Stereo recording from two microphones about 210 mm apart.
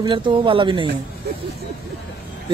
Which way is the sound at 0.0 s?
25° right (ahead or behind).